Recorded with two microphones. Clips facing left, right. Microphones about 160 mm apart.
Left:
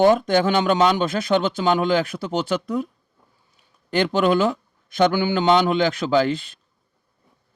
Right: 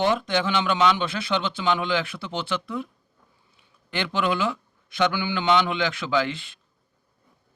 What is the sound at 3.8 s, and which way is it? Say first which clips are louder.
Speech: left 7 dB; 40° left (ahead or behind).